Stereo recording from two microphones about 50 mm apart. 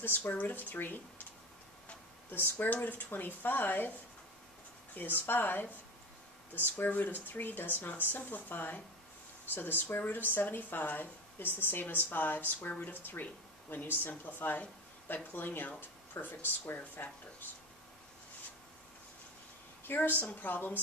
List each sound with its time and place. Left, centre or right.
0.4 s speech: left
2.3 s speech: left
4.9 s speech: left
19.8 s a woman's voice: left